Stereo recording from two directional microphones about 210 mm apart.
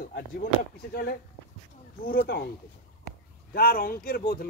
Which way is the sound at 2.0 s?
45° left (ahead or behind).